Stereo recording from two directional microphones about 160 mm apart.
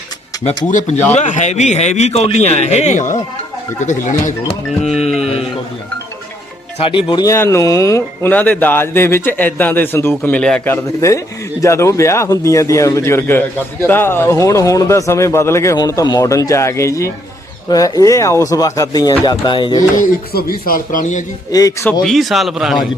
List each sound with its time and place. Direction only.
0.4 s a man's voice: 45° left (ahead or behind)
4.9 s speech: 40° left (ahead or behind)
6.7 s speech: 35° left (ahead or behind); by 10.8 s 5° left (ahead or behind)
11.6 s speech: 20° left (ahead or behind)
20.3 s a man's voice: 65° left (ahead or behind)
22.0 s a man's voice: centre (ahead or behind)